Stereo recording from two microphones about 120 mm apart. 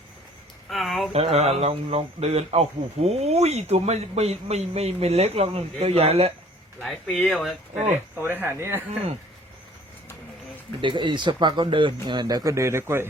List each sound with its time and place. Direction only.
0.7 s a sound: centre (ahead or behind)
1.1 s speech: 60° right (ahead or behind)
6.8 s speech: 5° left (ahead or behind)
7.8 s speech: 15° right (ahead or behind)
10.8 s speech: 45° right (ahead or behind); by 13.1 s 20° right (ahead or behind)